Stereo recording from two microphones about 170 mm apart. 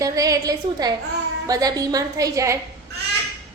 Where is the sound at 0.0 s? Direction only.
20° right (ahead or behind).